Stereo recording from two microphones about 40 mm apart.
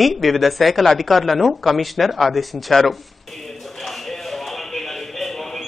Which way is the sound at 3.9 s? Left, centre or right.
Centre.